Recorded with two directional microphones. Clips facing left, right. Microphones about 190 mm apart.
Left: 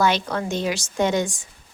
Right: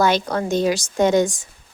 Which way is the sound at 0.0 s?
40° right (ahead or behind).